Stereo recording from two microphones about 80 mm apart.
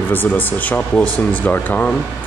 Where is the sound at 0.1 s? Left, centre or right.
Left.